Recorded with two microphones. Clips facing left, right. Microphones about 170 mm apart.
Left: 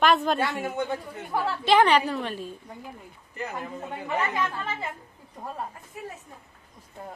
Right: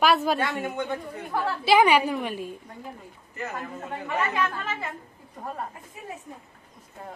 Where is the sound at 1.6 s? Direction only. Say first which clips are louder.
Right 1 dB; 10° right (ahead or behind).